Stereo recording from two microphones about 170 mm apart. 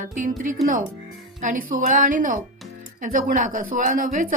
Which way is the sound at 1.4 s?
50° right (ahead or behind).